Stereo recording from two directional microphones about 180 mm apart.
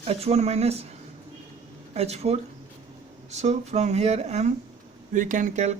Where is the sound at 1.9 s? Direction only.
35° right (ahead or behind).